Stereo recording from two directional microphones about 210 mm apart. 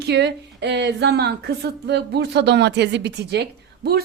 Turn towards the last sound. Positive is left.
turn(degrees=-50)  # may be behind; listen again after turning